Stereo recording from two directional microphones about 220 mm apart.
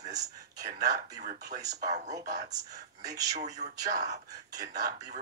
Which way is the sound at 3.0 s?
15° right (ahead or behind).